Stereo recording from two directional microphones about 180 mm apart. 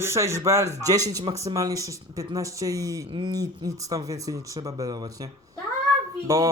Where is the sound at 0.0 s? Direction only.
15° right (ahead or behind).